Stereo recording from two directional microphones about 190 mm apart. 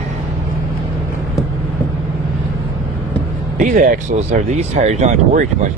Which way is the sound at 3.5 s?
40° right (ahead or behind).